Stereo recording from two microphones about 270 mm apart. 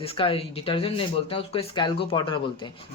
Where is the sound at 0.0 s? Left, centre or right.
Left.